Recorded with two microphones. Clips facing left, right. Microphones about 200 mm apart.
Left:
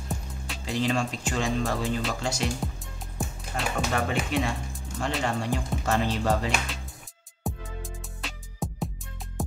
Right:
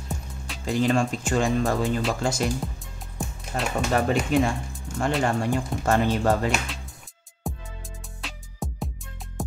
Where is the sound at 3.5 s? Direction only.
40° right (ahead or behind).